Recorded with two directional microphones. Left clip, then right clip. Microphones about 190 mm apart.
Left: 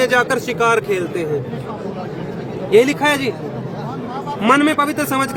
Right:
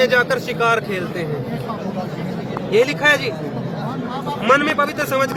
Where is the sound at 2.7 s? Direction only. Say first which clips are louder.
Left 2 dB; 60° left (ahead or behind).